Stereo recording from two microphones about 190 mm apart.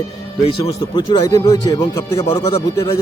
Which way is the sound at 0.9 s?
25° left (ahead or behind).